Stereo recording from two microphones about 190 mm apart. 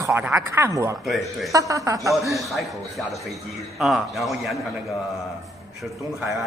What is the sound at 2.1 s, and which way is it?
A man's voice, centre (ahead or behind).